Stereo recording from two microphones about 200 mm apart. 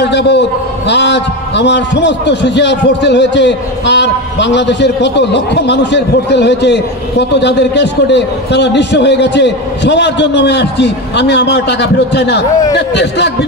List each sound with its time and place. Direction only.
0.0 s a man's voice: 60° left (ahead or behind)